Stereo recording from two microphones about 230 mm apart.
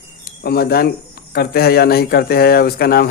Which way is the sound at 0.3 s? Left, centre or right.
Left.